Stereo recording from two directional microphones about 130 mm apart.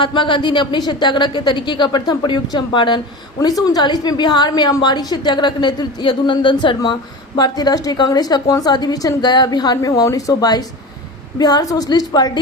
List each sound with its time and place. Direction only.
0.0 s a woman's voice: 40° left (ahead or behind)